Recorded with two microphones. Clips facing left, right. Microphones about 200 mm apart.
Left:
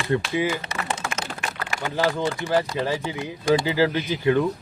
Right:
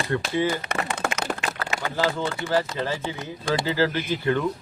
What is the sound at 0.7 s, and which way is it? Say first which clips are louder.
Speech: right 3 dB; 60° right (ahead or behind).